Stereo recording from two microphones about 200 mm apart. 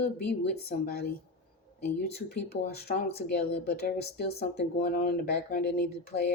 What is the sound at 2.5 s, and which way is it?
Speech, 50° left (ahead or behind).